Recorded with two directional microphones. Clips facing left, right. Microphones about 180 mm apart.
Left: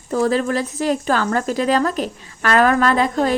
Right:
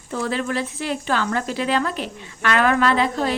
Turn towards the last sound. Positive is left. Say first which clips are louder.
# left 3 dB
turn(degrees=45)  # may be behind; listen again after turning